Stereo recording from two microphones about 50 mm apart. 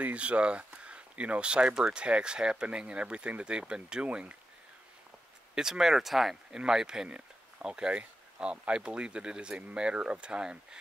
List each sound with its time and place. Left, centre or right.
0.0 s speech: right
5.5 s speech: centre